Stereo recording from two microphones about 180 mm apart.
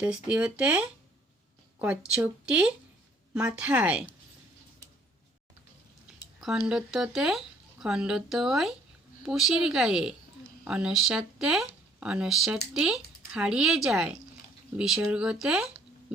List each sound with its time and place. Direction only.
0.0 s speech: 5° right (ahead or behind)
6.7 s speech: 5° right (ahead or behind)